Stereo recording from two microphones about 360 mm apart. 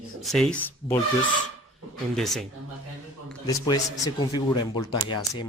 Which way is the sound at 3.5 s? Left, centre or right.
Centre.